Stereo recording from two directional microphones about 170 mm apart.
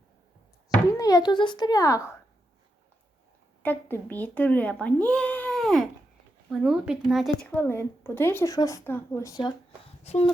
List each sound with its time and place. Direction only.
0.9 s speech: 20° left (ahead or behind)
3.6 s speech: 10° left (ahead or behind)
10.0 s speech: 35° left (ahead or behind)